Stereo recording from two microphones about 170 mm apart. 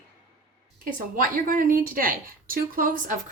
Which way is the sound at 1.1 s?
55° right (ahead or behind).